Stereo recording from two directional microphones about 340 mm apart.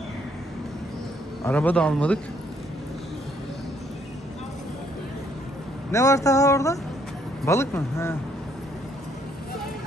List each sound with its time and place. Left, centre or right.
1.4 s a man's voice: centre
5.9 s a man's voice: centre